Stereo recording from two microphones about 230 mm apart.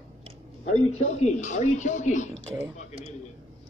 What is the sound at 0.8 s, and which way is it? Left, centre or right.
Speech, left.